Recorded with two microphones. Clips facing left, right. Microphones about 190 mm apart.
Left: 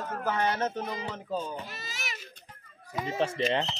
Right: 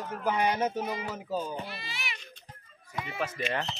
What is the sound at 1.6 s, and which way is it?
Baby cry, 45° left (ahead or behind).